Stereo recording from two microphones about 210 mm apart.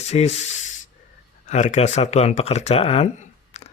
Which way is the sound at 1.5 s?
35° left (ahead or behind).